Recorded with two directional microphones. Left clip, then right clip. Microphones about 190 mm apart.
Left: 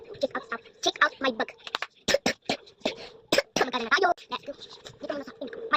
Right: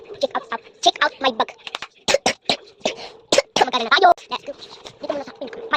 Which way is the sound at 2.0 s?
Centre (ahead or behind).